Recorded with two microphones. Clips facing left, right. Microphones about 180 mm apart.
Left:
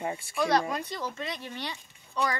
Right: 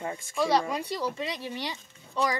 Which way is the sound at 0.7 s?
10° right (ahead or behind).